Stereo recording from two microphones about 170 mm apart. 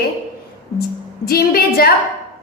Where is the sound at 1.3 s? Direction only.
65° left (ahead or behind).